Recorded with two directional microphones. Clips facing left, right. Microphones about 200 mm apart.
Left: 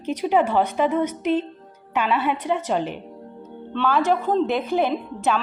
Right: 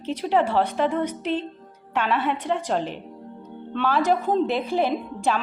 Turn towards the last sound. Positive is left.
turn(degrees=0)  # may be behind; listen again after turning